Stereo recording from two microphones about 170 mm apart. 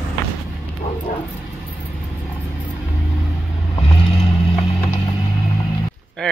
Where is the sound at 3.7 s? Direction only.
30° left (ahead or behind).